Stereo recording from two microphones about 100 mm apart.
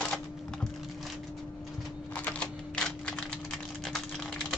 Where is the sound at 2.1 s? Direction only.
15° left (ahead or behind).